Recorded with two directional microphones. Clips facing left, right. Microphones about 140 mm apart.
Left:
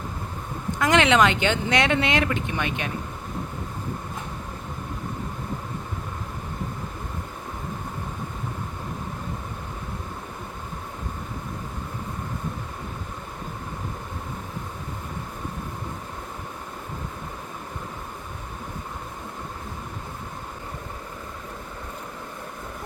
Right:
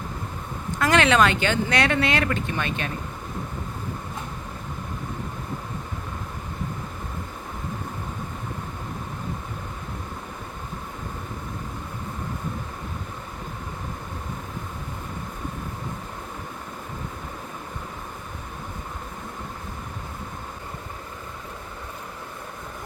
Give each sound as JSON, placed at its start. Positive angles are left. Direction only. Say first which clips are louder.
{"t": 0.8, "sound": "speech", "louder": "even", "side_deg": 20}